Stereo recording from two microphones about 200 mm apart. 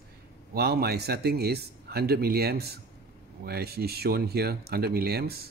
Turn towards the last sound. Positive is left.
turn(degrees=-50)  # may be behind; listen again after turning